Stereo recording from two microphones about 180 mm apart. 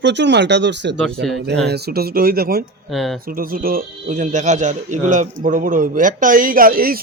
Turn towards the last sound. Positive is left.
turn(degrees=-55)  # may be behind; listen again after turning